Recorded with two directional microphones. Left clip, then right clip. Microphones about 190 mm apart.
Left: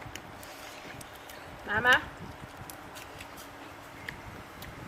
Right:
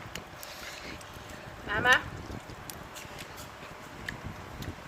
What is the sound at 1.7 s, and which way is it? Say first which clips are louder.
Speech: even; 5° right (ahead or behind).